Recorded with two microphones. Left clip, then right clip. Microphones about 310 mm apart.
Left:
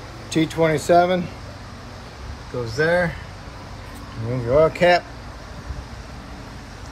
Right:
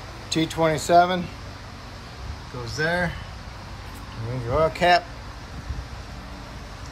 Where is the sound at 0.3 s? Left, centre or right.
Centre.